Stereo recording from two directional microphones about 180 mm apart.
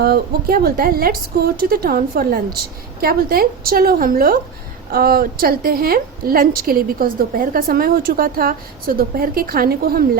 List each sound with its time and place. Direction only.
0.0 s a woman's voice: 55° right (ahead or behind)